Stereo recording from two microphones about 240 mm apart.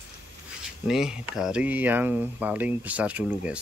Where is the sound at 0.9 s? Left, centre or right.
Centre.